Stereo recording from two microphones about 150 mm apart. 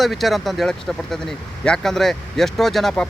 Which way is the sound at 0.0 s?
Centre (ahead or behind).